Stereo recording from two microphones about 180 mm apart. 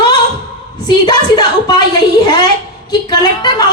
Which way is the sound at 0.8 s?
25° left (ahead or behind).